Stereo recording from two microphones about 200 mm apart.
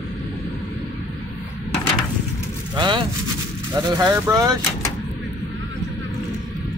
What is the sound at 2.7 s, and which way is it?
Speech, 25° right (ahead or behind).